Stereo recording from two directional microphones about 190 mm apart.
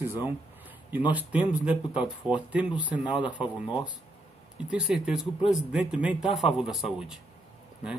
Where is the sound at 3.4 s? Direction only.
5° right (ahead or behind).